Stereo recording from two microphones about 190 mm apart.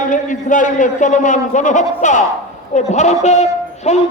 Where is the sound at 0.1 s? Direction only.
40° left (ahead or behind).